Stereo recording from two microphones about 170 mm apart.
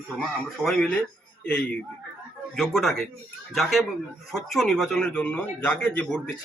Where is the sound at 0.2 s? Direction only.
5° left (ahead or behind).